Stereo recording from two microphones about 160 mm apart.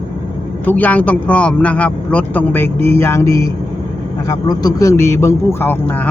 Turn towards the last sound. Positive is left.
turn(degrees=10)  # may be behind; listen again after turning